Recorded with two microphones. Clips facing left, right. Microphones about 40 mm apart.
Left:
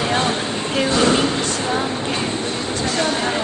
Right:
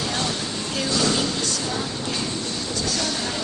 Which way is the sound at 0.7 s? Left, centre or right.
Left.